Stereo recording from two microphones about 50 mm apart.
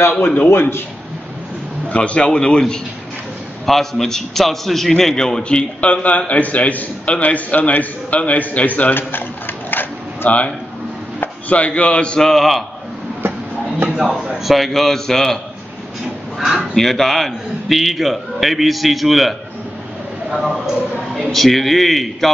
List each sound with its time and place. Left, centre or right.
0.5 s a man's voice: left
1.9 s a man's voice: left
3.6 s a man's voice: centre; by 10.4 s left
11.4 s a man's voice: left; by 12.6 s centre
13.9 s a man's voice: centre
16.3 s a man's voice: centre
16.7 s a man's voice: centre
20.2 s a sound: centre
21.3 s a man's voice: centre